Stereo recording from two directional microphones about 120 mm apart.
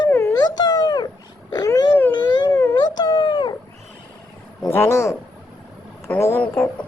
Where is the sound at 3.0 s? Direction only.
40° left (ahead or behind).